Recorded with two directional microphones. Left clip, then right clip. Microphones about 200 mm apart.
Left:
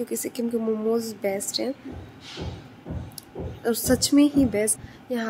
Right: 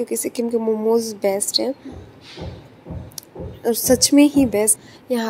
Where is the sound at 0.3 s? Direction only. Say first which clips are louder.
Right 6 dB; 10° right (ahead or behind).